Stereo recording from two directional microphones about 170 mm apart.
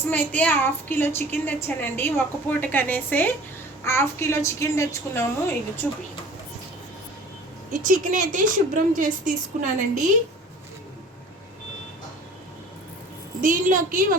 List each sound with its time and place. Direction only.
0.1 s a woman's voice: 10° left (ahead or behind)
7.9 s a woman's voice: 50° right (ahead or behind)
13.4 s a woman's voice: 55° right (ahead or behind)